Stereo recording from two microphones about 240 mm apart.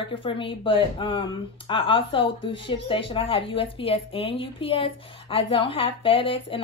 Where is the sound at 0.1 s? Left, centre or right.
Left.